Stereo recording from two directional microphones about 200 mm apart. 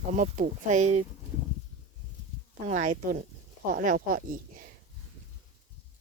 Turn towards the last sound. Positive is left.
turn(degrees=-45)  # may be behind; listen again after turning